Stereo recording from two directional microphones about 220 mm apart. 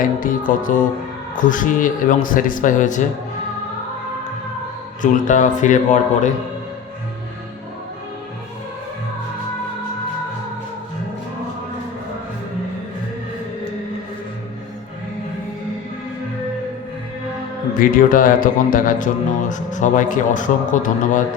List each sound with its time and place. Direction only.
0.2 s speech: 35° left (ahead or behind)
5.3 s speech: 35° left (ahead or behind)
17.7 s speech: 40° left (ahead or behind)